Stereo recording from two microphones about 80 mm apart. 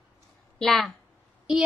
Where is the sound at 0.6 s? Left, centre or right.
Centre.